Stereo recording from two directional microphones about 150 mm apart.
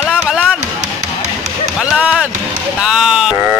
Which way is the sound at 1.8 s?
5° right (ahead or behind).